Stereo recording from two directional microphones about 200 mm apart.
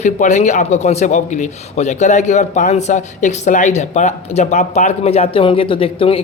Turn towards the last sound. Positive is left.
turn(degrees=30)  # may be behind; listen again after turning